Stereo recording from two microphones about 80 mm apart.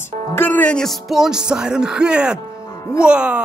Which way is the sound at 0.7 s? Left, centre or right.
Centre.